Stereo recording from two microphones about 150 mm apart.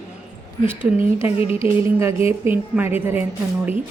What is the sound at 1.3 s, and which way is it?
Music, 40° left (ahead or behind).